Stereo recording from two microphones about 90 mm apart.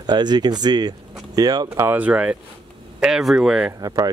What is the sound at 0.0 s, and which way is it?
Speech, 55° right (ahead or behind).